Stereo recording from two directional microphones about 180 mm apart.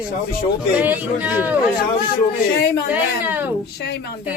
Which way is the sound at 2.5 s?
65° left (ahead or behind).